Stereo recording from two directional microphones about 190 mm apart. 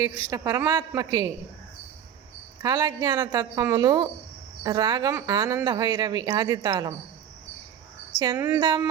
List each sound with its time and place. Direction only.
0.0 s a man's voice: 20° right (ahead or behind)
2.6 s speech: 20° right (ahead or behind)
8.2 s speech: 25° right (ahead or behind)